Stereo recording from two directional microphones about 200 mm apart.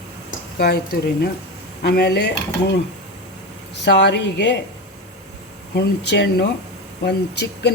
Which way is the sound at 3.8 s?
60° left (ahead or behind).